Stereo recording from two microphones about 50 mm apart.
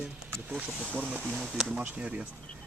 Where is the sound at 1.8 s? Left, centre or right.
Right.